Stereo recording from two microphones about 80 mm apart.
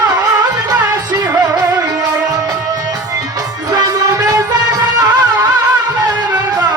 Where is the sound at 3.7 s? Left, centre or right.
Right.